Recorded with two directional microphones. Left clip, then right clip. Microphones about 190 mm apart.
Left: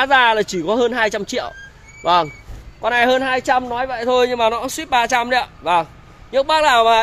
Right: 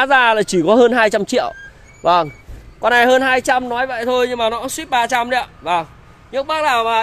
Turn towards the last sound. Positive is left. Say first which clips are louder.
# left 3 dB
turn(degrees=20)  # may be behind; listen again after turning